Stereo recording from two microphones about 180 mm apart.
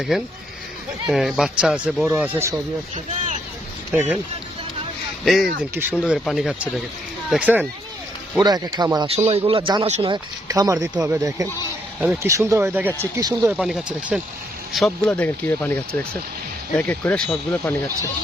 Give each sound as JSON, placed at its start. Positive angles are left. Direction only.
{"t": 1.0, "sound": "speech", "side_deg": 0}
{"t": 5.2, "sound": "speech", "side_deg": 0}
{"t": 8.4, "sound": "speech", "side_deg": -20}
{"t": 9.1, "sound": "speech", "side_deg": -35}
{"t": 13.6, "sound": "speech", "side_deg": -5}